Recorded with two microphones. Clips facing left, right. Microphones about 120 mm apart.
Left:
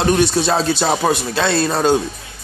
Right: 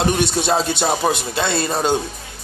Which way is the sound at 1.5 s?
70° left (ahead or behind).